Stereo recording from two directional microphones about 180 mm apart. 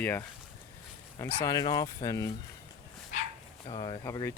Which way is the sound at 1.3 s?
25° left (ahead or behind).